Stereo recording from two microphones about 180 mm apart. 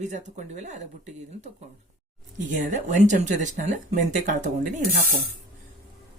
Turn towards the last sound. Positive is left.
turn(degrees=-45)  # may be behind; listen again after turning